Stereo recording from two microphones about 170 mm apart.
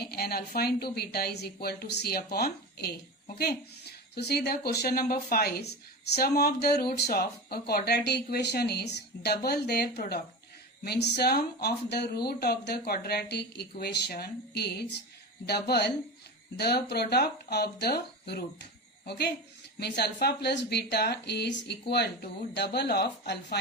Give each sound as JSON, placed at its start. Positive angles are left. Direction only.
{"t": 0.0, "sound": "speech", "side_deg": 65}